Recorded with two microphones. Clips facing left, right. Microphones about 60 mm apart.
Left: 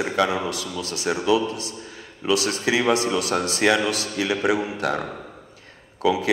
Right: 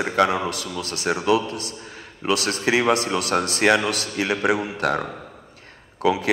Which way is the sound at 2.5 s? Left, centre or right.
Right.